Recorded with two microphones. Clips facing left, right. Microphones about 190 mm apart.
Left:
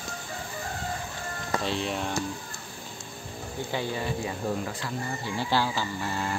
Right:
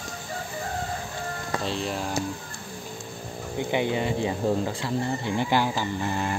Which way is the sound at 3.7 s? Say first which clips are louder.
Right 5 dB; 20° right (ahead or behind).